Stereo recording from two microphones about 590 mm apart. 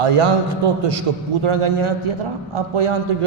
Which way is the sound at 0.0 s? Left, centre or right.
Right.